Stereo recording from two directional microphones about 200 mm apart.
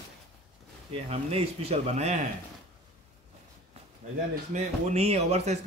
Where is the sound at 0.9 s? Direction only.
30° right (ahead or behind).